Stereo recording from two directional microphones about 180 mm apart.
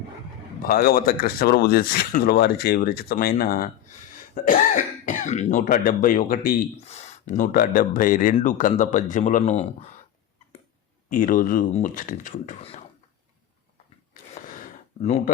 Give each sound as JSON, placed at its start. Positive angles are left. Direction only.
{"t": 0.7, "sound": "speech", "side_deg": 55}
{"t": 4.4, "sound": "speech", "side_deg": 45}
{"t": 6.7, "sound": "speech", "side_deg": 35}
{"t": 11.1, "sound": "speech", "side_deg": 50}
{"t": 14.1, "sound": "a sound", "side_deg": 45}